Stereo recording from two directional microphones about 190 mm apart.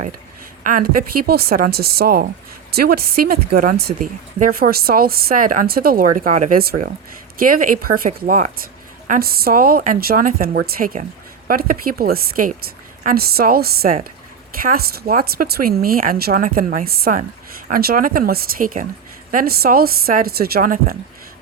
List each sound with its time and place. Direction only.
0.6 s speech: 45° right (ahead or behind)